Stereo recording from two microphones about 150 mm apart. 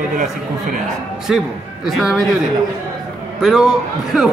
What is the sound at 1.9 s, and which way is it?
Speech, centre (ahead or behind).